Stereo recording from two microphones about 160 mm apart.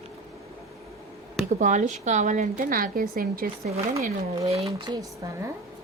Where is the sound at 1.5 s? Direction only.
50° right (ahead or behind).